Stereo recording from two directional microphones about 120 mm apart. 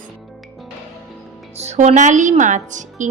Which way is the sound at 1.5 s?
65° right (ahead or behind).